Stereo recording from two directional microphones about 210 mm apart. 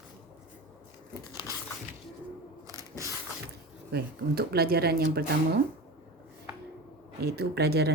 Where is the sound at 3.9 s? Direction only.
50° right (ahead or behind).